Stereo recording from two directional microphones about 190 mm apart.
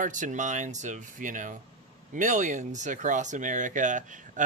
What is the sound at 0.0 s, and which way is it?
Speech, 40° right (ahead or behind).